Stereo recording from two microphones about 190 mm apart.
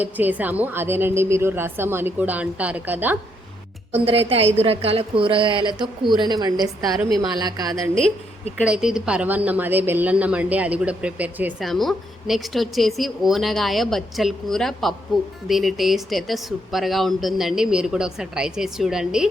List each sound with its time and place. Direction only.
0.0 s a woman's voice: 10° right (ahead or behind)
3.9 s a woman's voice: 30° right (ahead or behind)
8.6 s a woman's voice: 5° right (ahead or behind)